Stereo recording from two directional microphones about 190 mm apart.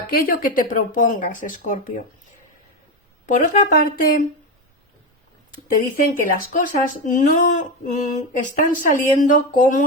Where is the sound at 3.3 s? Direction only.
45° left (ahead or behind).